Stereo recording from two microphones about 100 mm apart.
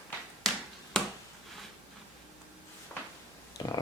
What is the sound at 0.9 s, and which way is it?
Finger snapping, 5° left (ahead or behind).